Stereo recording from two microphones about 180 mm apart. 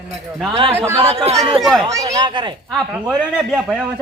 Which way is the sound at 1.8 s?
20° right (ahead or behind).